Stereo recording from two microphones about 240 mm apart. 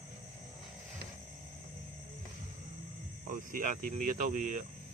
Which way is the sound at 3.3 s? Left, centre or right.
Right.